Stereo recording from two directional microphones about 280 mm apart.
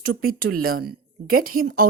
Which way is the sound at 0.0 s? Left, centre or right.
Right.